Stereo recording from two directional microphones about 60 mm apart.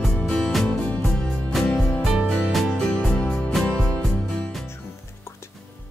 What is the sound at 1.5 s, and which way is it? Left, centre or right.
Music, centre.